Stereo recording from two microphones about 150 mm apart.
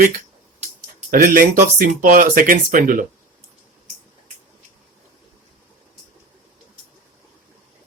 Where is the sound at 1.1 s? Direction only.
70° right (ahead or behind).